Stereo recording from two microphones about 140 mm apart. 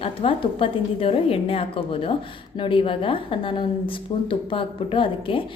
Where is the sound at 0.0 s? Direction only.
40° left (ahead or behind).